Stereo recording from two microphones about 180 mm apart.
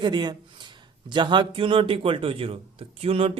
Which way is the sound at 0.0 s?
25° right (ahead or behind).